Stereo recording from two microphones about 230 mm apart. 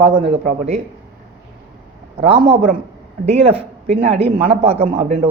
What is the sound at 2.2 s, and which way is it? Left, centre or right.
Speech, right.